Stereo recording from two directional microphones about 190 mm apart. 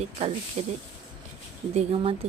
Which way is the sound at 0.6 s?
35° right (ahead or behind).